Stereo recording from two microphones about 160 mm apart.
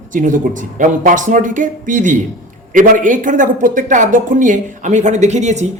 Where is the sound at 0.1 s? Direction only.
55° right (ahead or behind).